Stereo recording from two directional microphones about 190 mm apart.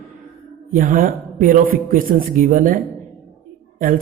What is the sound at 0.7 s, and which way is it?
Speech, 45° right (ahead or behind).